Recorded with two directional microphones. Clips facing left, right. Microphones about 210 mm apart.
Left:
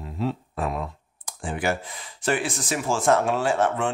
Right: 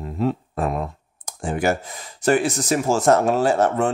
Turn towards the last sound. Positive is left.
turn(degrees=-40)  # may be behind; listen again after turning